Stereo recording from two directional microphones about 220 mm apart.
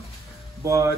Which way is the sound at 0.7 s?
15° right (ahead or behind).